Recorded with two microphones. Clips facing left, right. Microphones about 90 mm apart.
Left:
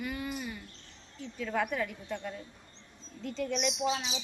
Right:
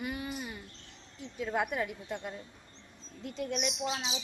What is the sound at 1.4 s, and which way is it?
A woman's voice, 15° right (ahead or behind).